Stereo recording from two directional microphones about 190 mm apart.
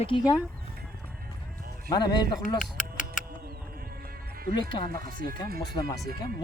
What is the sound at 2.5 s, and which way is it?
Music, 45° left (ahead or behind).